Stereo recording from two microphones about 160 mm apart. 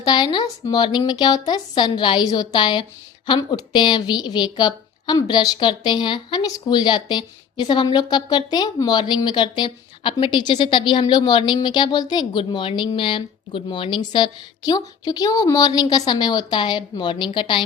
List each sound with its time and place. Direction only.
0.0 s speech: 25° left (ahead or behind)